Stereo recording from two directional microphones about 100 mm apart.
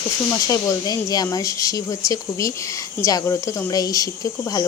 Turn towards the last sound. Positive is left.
turn(degrees=40)  # may be behind; listen again after turning